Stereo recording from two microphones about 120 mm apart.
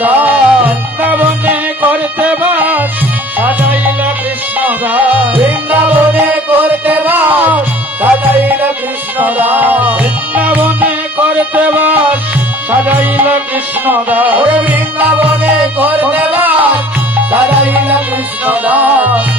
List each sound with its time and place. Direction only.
0.0 s music: 15° right (ahead or behind)